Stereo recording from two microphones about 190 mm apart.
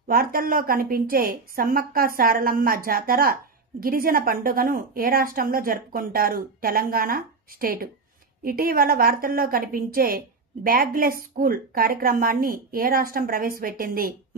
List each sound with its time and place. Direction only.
0.1 s a woman's voice: 50° right (ahead or behind)